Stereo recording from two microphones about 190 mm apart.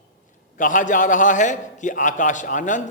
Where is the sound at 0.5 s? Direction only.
45° left (ahead or behind).